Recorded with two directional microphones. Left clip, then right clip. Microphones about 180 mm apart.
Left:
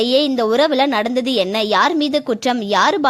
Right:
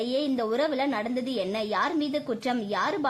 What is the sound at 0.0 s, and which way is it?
A woman's voice, 40° left (ahead or behind).